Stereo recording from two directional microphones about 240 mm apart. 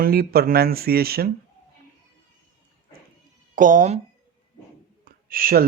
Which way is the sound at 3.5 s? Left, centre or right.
Right.